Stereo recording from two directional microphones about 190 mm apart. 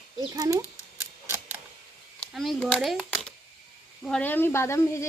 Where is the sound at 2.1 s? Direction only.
Centre (ahead or behind).